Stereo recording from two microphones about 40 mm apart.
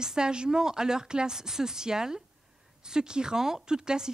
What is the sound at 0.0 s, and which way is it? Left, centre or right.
Speech, centre.